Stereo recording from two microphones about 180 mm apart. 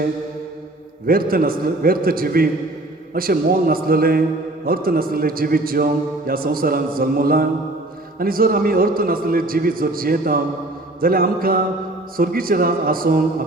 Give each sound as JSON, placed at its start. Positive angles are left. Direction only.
{"t": 1.0, "sound": "a man's voice", "side_deg": -55}